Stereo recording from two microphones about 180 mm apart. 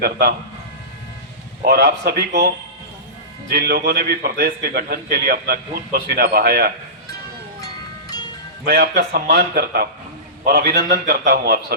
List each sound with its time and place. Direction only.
0.0 s a man's voice: 60° right (ahead or behind)
1.6 s a man's voice: 60° right (ahead or behind)
3.5 s a man's voice: 65° right (ahead or behind)
8.6 s a man's voice: 60° right (ahead or behind)